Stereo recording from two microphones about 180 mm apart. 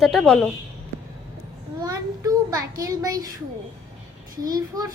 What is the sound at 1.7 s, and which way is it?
A child's voice, 20° right (ahead or behind).